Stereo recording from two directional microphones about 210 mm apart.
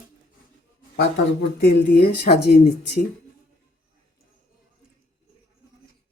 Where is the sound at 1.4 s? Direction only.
50° left (ahead or behind).